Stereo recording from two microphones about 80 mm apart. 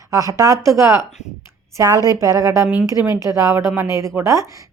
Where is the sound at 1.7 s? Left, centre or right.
Right.